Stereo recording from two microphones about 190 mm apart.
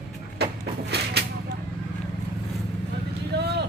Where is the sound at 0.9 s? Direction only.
60° right (ahead or behind).